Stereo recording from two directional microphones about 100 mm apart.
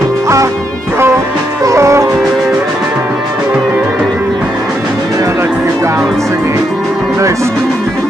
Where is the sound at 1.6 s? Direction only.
30° right (ahead or behind).